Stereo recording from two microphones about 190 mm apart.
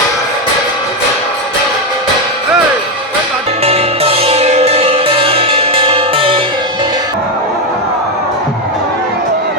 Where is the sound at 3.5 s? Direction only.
30° right (ahead or behind).